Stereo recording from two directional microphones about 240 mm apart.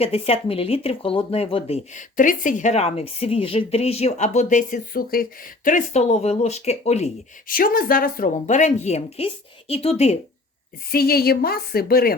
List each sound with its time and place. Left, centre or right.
0.0 s speech: left
10.9 s speech: left